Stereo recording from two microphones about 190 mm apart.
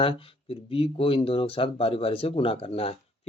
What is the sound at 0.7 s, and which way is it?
Speech, 30° left (ahead or behind).